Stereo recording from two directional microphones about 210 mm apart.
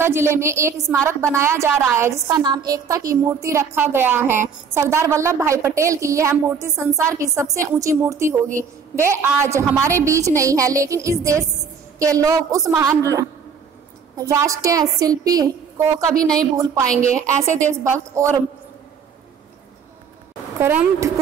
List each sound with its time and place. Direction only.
0.0 s a woman's voice: 10° right (ahead or behind)
16.2 s a woman's voice: 5° left (ahead or behind)
17.0 s a woman's voice: 40° right (ahead or behind)
17.4 s a woman's voice: 15° right (ahead or behind)
20.5 s a woman's voice: 10° right (ahead or behind)